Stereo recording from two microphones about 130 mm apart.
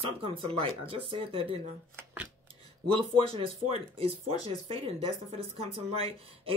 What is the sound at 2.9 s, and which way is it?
Speech, 45° right (ahead or behind).